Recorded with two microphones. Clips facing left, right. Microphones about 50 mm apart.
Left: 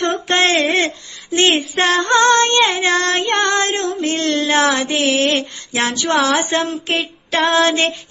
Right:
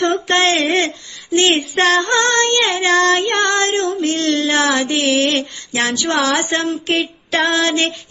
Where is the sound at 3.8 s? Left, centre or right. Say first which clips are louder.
Right 2 dB; centre.